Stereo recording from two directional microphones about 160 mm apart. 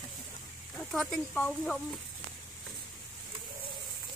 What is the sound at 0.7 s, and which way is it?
Speech, 5° left (ahead or behind).